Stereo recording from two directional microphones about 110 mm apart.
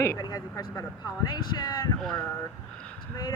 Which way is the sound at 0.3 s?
35° left (ahead or behind).